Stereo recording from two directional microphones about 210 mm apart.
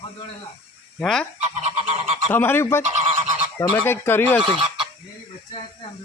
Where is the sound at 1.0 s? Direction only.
Centre (ahead or behind).